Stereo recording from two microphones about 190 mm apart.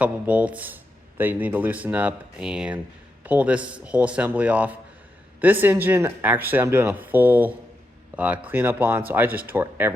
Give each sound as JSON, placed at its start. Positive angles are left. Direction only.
{"t": 0.0, "sound": "speech", "side_deg": -5}